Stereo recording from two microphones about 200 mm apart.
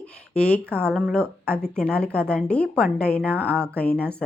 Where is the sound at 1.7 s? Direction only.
5° left (ahead or behind).